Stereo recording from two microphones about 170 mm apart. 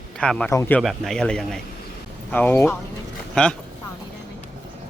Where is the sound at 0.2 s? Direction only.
5° left (ahead or behind).